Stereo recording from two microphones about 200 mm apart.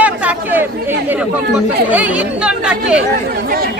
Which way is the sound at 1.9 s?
5° right (ahead or behind).